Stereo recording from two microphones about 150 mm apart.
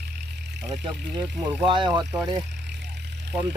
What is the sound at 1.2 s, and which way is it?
Speech, centre (ahead or behind).